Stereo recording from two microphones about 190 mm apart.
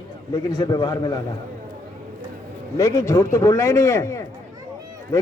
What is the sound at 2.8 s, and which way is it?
A man's voice, 15° left (ahead or behind).